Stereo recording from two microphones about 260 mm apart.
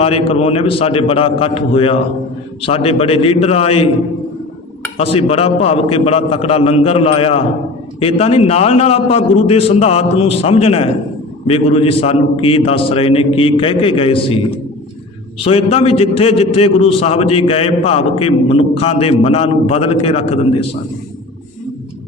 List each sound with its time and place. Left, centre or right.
0.0 s a man's voice: left
4.9 s a man's voice: left
15.4 s a man's voice: left